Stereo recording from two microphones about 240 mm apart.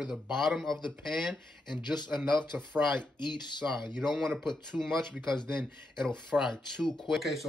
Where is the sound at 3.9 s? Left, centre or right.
Centre.